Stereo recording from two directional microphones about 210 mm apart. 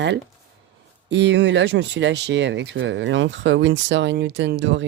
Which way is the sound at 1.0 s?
60° right (ahead or behind).